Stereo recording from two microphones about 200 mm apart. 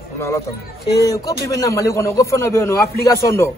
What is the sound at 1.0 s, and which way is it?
A man's voice, 15° left (ahead or behind).